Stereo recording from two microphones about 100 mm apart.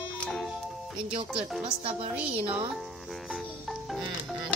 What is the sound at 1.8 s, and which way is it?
Speech, 70° right (ahead or behind).